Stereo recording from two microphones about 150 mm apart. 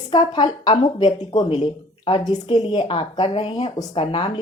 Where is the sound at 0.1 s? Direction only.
30° left (ahead or behind).